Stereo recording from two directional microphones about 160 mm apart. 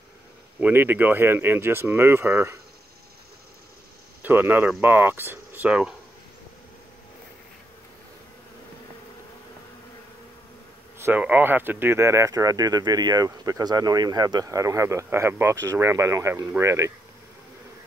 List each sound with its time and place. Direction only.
0.6 s speech: 10° right (ahead or behind)
4.2 s speech: 10° right (ahead or behind)
11.0 s speech: 10° right (ahead or behind)